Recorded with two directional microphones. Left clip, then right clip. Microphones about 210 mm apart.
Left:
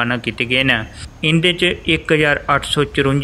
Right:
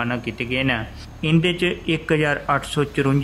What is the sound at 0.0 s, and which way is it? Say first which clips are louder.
Speech: left 6 dB; 15° left (ahead or behind).